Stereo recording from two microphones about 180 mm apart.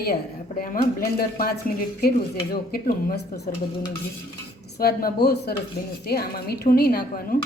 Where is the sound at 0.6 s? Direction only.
50° left (ahead or behind).